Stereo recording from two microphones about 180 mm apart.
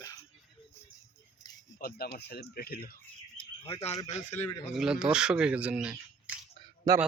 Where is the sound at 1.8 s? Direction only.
60° left (ahead or behind).